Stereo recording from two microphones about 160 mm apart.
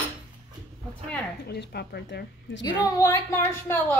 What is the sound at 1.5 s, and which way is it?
Speech, 90° left.